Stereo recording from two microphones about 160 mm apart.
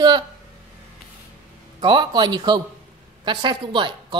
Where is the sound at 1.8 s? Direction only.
25° right (ahead or behind).